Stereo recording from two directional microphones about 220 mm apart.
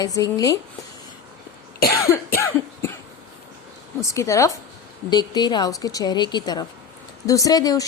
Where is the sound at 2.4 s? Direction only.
10° left (ahead or behind).